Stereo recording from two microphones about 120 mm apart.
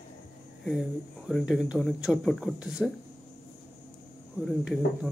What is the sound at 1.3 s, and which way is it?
Speech, centre (ahead or behind).